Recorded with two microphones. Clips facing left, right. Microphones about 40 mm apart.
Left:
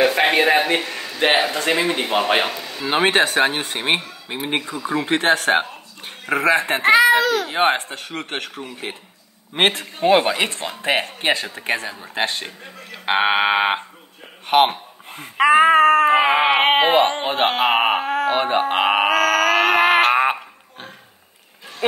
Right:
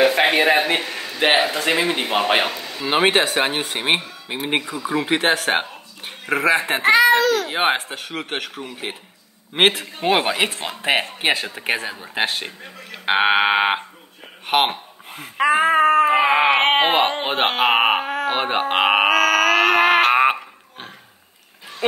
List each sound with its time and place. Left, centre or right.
0.0 s a man's voice: centre
7.4 s speech: centre
11.9 s speech: centre
14.5 s a sound: centre
15.3 s a sound: left
15.7 s a sound: left
16.2 s baby cry: centre
16.5 s a sound: centre
17.2 s speech: right
17.5 s speech: centre
18.3 s speech: centre
18.9 s music: centre